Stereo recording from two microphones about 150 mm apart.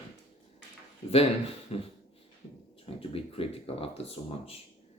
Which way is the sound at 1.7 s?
40° left (ahead or behind).